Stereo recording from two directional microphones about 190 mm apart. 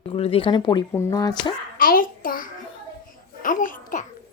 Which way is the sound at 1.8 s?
50° left (ahead or behind).